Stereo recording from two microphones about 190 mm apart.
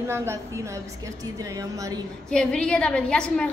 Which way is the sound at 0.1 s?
15° right (ahead or behind).